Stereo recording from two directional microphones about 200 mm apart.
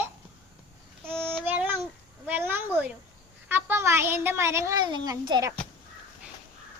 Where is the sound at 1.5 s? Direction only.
10° right (ahead or behind).